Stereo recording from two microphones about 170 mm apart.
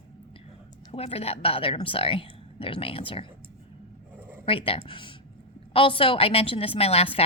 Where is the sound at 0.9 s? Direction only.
35° left (ahead or behind).